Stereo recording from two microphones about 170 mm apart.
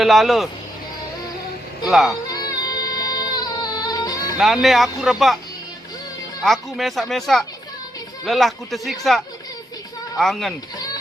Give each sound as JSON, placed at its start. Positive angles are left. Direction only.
{"t": 0.0, "sound": "speech", "side_deg": 0}
{"t": 1.8, "sound": "speech", "side_deg": 0}
{"t": 2.3, "sound": "music", "side_deg": 20}
{"t": 4.4, "sound": "speech", "side_deg": 0}
{"t": 6.4, "sound": "speech", "side_deg": 0}